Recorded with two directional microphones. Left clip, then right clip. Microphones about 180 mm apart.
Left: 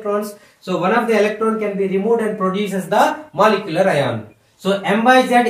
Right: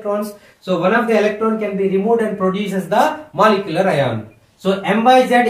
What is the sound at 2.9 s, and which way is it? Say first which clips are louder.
Speech: even; 20° right (ahead or behind).